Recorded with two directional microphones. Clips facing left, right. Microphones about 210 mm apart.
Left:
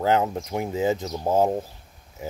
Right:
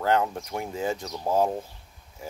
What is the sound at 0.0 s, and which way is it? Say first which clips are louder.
Speech: left 2 dB; 25° left (ahead or behind).